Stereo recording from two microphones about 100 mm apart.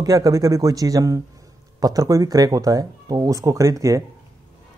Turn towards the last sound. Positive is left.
turn(degrees=-30)  # may be behind; listen again after turning